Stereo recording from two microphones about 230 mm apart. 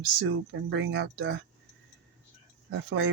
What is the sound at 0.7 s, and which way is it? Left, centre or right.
Speech, right.